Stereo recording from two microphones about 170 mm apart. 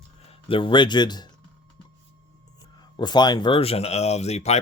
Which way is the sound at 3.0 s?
25° left (ahead or behind).